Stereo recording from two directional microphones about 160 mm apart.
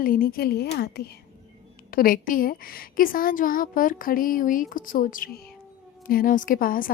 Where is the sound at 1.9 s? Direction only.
65° left (ahead or behind).